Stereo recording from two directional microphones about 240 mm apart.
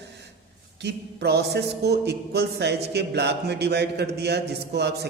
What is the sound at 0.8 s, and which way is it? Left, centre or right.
A man's voice, right.